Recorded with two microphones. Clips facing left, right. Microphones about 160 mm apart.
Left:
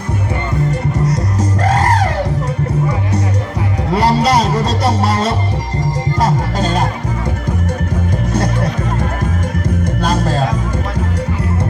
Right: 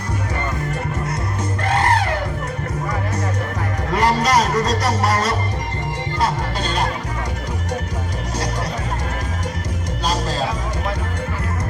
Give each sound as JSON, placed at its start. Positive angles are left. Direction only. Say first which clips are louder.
{"t": 1.0, "sound": "music", "louder": "left 7 dB", "side_deg": 40}
{"t": 3.9, "sound": "music", "louder": "left 4 dB", "side_deg": 30}
{"t": 6.1, "sound": "music", "louder": "left 4 dB", "side_deg": 45}
{"t": 10.0, "sound": "music", "louder": "left 4 dB", "side_deg": 55}